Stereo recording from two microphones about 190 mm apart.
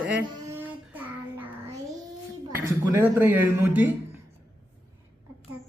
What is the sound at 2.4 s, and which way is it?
A man's voice, 15° right (ahead or behind).